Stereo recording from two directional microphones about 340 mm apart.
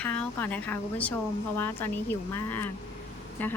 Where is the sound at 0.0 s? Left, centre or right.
Centre.